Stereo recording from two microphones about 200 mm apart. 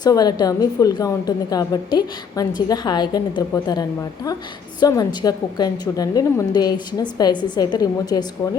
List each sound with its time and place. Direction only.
0.0 s a woman's voice: 20° left (ahead or behind)